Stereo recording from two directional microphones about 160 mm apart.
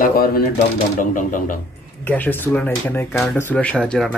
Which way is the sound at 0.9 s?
55° left (ahead or behind).